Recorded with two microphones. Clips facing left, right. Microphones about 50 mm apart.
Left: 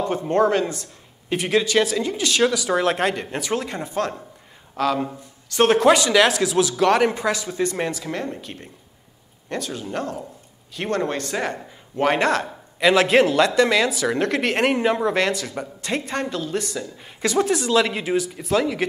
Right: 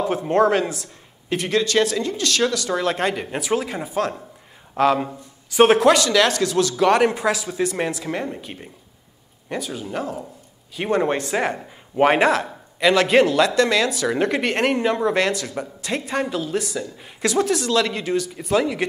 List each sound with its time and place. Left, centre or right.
0.0 s speech: centre
4.7 s speech: centre
5.9 s speech: centre
10.8 s speech: centre